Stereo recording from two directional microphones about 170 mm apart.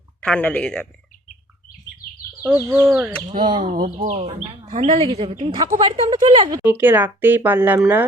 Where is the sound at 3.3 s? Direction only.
55° right (ahead or behind); by 6.6 s 25° right (ahead or behind).